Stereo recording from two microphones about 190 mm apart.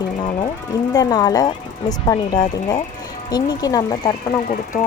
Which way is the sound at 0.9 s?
20° left (ahead or behind).